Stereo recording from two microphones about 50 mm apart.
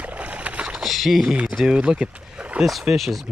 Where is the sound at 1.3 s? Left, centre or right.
Right.